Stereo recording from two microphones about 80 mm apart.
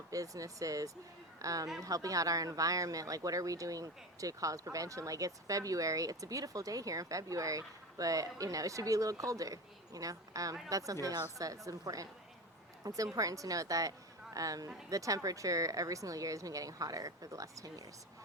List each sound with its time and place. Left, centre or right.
0.1 s speech: right